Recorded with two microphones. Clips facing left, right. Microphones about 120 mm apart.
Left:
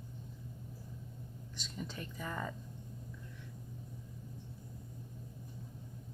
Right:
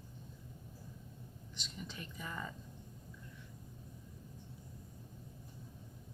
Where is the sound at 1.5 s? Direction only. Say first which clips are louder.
Left 4 dB; 40° left (ahead or behind).